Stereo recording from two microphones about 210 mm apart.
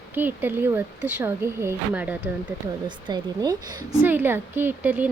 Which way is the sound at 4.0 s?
10° right (ahead or behind).